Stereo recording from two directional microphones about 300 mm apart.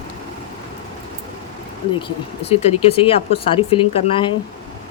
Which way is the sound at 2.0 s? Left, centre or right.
Centre.